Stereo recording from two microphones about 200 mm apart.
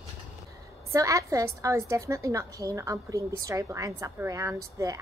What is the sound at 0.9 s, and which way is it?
A woman's voice, 15° right (ahead or behind).